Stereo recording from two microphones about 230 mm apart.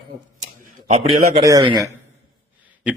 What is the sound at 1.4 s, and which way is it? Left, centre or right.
Speech, centre.